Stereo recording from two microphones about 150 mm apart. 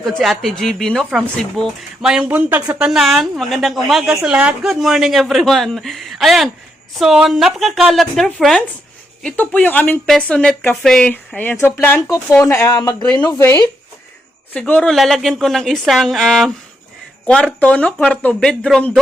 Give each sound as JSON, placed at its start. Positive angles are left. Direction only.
{"t": 0.0, "sound": "a woman's voice", "side_deg": 0}
{"t": 12.0, "sound": "a woman's voice", "side_deg": 25}